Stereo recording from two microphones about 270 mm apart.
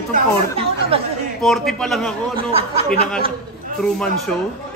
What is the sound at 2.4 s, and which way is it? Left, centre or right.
Speech, right.